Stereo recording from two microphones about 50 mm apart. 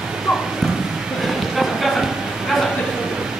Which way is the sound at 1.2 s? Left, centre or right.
Centre.